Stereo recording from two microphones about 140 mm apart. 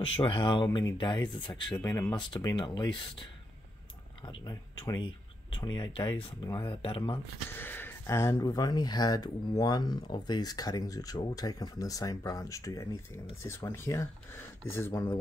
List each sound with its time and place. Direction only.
0.0 s speech: 40° left (ahead or behind)
4.3 s speech: 30° left (ahead or behind)
7.5 s speech: 15° left (ahead or behind)